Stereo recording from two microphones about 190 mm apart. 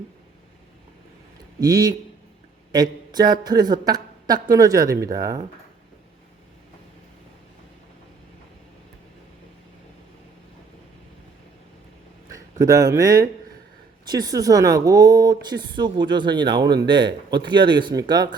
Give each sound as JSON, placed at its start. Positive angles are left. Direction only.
{"t": 1.5, "sound": "a woman's voice", "side_deg": -20}
{"t": 12.3, "sound": "speech", "side_deg": -15}